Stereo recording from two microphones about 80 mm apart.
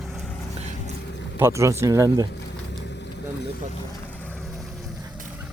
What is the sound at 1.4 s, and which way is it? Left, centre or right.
Speech, right.